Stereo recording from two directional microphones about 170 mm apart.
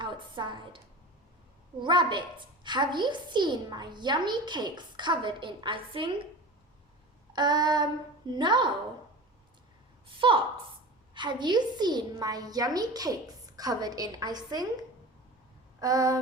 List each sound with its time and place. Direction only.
0.0 s a sound: 30° right (ahead or behind)
1.8 s a woman's voice: 30° right (ahead or behind)
7.3 s a woman's voice: 25° right (ahead or behind)
10.2 s a woman's voice: 30° right (ahead or behind)
15.8 s a woman's voice: 20° right (ahead or behind)